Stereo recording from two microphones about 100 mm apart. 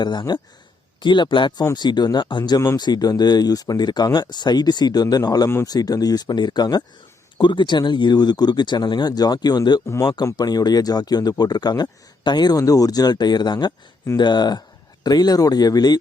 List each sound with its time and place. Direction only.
0.0 s speech: 45° left (ahead or behind)